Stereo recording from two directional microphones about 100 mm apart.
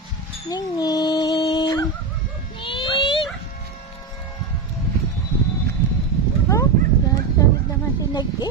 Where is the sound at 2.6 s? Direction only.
55° left (ahead or behind).